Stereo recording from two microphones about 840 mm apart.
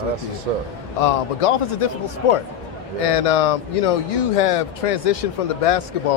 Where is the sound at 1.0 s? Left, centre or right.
Left.